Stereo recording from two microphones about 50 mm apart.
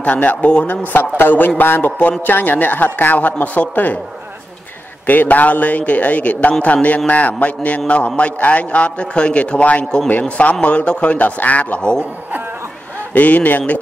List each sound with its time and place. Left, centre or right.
0.0 s speech: left
0.9 s a man's voice: left
5.0 s speech: left
13.1 s speech: left